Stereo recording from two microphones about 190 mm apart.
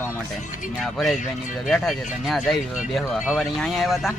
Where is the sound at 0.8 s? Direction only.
Centre (ahead or behind).